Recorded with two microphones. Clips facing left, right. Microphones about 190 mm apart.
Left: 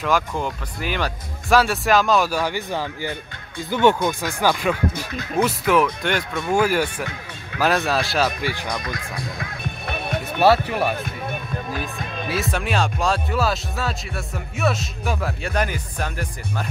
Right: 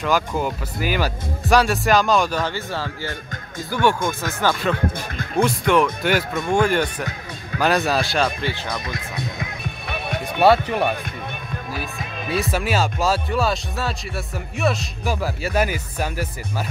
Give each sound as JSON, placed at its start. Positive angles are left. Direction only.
{"t": 0.0, "sound": "speech", "side_deg": -5}
{"t": 6.5, "sound": "speech", "side_deg": 5}
{"t": 8.8, "sound": "speech", "side_deg": -25}
{"t": 9.8, "sound": "music", "side_deg": 0}
{"t": 12.0, "sound": "speech", "side_deg": 0}